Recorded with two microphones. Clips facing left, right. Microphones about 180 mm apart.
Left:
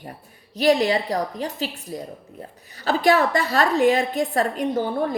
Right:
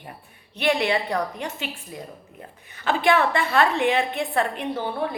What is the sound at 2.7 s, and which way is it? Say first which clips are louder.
A woman's voice: left 2 dB; 40° left (ahead or behind).